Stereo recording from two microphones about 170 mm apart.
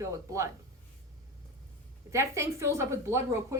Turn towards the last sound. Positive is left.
turn(degrees=-15)  # may be behind; listen again after turning